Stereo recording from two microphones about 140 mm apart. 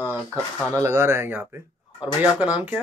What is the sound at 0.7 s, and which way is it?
Speech, 20° right (ahead or behind).